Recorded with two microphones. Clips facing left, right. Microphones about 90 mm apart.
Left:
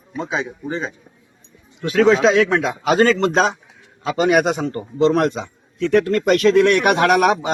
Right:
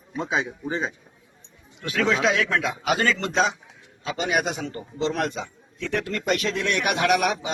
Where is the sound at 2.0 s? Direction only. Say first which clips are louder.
Left 9 dB; 30° left (ahead or behind).